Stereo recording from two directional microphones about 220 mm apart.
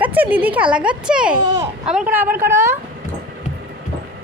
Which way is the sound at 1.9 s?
5° right (ahead or behind).